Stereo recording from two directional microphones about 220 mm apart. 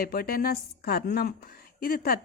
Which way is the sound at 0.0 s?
40° left (ahead or behind).